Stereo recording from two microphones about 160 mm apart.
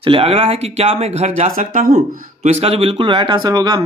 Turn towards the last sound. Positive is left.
turn(degrees=-25)  # may be behind; listen again after turning